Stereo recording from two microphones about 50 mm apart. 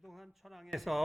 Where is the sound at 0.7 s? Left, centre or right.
Centre.